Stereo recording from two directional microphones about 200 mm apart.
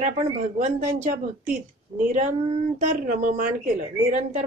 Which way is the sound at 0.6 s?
30° right (ahead or behind).